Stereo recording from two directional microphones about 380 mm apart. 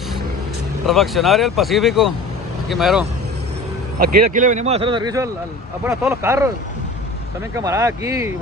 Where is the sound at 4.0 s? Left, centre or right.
Right; by 6.5 s centre.